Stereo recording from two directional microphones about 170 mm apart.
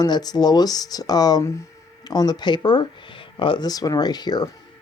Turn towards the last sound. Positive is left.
turn(degrees=25)  # may be behind; listen again after turning